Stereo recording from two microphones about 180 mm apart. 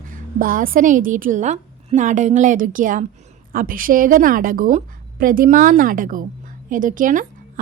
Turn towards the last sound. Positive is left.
turn(degrees=-45)  # may be behind; listen again after turning